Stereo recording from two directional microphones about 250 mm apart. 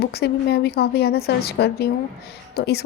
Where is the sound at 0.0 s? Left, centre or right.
Left.